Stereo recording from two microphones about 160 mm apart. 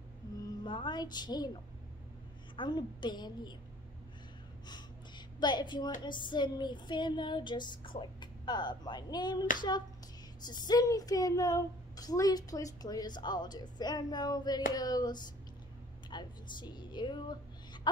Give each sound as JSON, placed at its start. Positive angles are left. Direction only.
{"t": 0.7, "sound": "speech", "side_deg": 30}
{"t": 2.5, "sound": "speech", "side_deg": 30}
{"t": 4.6, "sound": "a sound", "side_deg": 25}
{"t": 6.0, "sound": "speech", "side_deg": 30}